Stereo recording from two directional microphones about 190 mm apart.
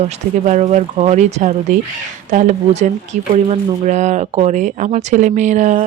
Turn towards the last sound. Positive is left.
turn(degrees=-40)  # may be behind; listen again after turning